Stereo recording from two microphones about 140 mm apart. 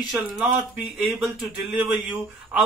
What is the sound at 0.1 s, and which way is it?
Speech, 10° right (ahead or behind).